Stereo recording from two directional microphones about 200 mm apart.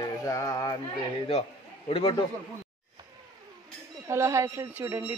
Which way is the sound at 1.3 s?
30° left (ahead or behind).